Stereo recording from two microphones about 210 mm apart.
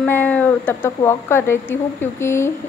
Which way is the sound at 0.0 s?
10° left (ahead or behind).